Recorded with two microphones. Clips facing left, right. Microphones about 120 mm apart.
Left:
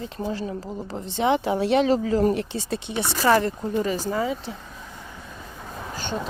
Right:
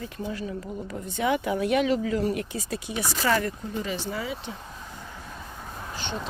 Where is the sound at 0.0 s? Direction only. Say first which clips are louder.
Left 4 dB; 30° left (ahead or behind).